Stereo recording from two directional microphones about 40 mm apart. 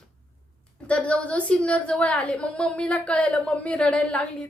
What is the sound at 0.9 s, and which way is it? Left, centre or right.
A woman's voice, left.